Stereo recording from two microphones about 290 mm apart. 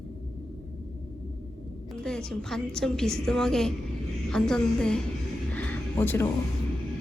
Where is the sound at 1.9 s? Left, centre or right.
Centre.